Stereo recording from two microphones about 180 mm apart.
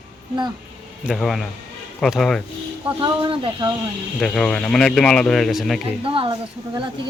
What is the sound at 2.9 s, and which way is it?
Speech, 25° right (ahead or behind).